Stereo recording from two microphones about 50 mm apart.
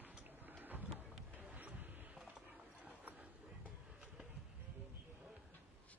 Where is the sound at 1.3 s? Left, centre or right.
Right.